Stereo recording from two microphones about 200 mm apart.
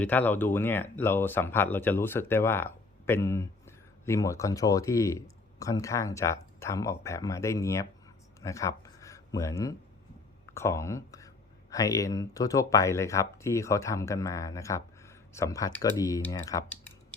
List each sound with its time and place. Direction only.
0.0 s speech: 10° left (ahead or behind)
8.4 s a sound: 15° left (ahead or behind)
10.5 s speech: 15° left (ahead or behind)